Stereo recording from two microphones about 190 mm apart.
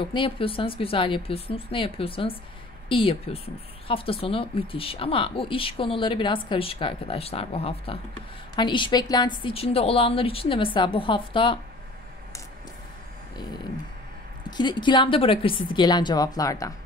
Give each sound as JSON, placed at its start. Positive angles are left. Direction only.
{"t": 0.1, "sound": "speech", "side_deg": 25}
{"t": 14.6, "sound": "speech", "side_deg": 25}